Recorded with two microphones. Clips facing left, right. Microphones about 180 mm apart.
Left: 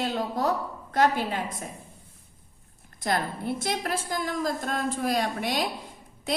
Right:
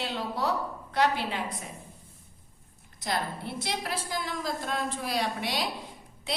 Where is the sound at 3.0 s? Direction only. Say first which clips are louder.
Left 4 dB; 50° left (ahead or behind).